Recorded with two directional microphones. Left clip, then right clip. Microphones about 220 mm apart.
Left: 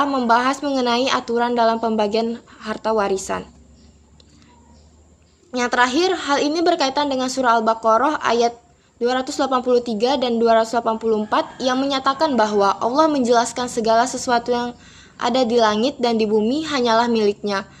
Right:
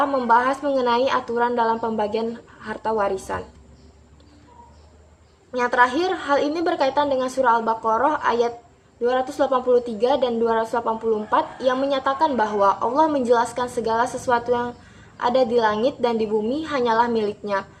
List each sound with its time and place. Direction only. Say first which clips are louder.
0.0 s a woman's voice: left 1 dB; 45° left (ahead or behind)
5.5 s a woman's voice: even; 45° left (ahead or behind)